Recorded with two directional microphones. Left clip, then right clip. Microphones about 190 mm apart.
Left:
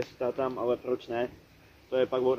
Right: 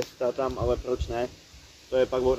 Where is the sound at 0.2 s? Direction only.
5° left (ahead or behind).